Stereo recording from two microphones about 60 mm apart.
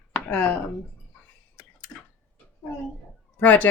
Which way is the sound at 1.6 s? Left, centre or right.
Left.